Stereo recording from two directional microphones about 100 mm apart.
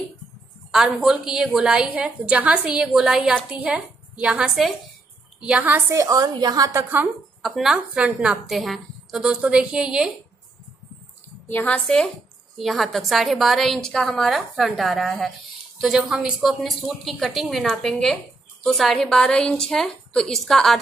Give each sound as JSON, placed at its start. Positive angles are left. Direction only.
{"t": 0.7, "sound": "a woman's voice", "side_deg": -5}
{"t": 5.9, "sound": "a woman's voice", "side_deg": -35}
{"t": 6.8, "sound": "a woman's voice", "side_deg": -20}
{"t": 7.4, "sound": "a woman's voice", "side_deg": 0}
{"t": 7.9, "sound": "a woman's voice", "side_deg": -15}
{"t": 11.4, "sound": "a woman's voice", "side_deg": 15}
{"t": 11.8, "sound": "a woman's voice", "side_deg": 5}